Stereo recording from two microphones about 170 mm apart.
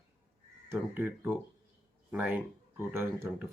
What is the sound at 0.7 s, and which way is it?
Speech, 10° right (ahead or behind).